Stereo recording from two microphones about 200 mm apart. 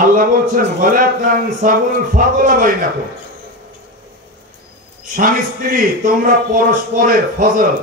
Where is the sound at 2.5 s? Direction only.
45° right (ahead or behind).